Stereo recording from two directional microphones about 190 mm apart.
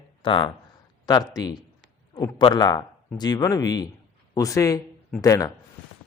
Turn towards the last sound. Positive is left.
turn(degrees=20)  # may be behind; listen again after turning